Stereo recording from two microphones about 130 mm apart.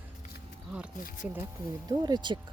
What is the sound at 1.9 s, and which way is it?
Speech, 30° right (ahead or behind).